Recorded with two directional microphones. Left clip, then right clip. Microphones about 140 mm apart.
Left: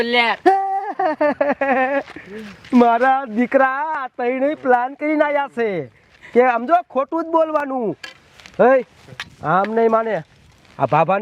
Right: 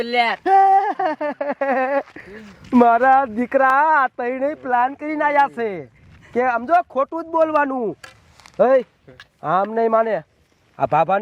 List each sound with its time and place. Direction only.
0.4 s a sound: 5° left (ahead or behind)
1.5 s speech: 35° right (ahead or behind)
3.3 s speech: 35° right (ahead or behind)
4.7 s speech: 5° right (ahead or behind)
6.3 s speech: 30° right (ahead or behind)
6.6 s speech: 45° right (ahead or behind)
7.1 s speech: 10° right (ahead or behind)
8.5 s speech: 30° right (ahead or behind)